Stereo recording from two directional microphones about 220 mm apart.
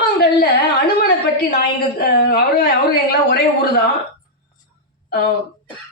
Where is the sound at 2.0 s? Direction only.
45° left (ahead or behind).